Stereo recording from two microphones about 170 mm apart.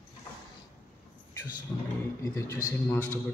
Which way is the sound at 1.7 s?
20° left (ahead or behind).